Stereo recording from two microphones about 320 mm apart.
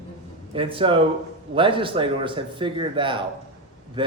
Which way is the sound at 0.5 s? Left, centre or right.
Centre.